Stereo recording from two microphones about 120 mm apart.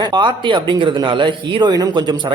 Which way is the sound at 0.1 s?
40° right (ahead or behind).